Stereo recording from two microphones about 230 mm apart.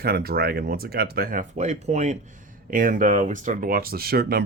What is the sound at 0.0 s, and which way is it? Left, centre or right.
Speech, right.